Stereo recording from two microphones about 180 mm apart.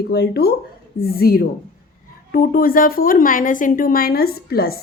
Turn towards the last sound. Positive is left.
turn(degrees=55)  # may be behind; listen again after turning